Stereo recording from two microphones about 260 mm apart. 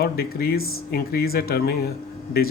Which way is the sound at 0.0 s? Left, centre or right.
Left.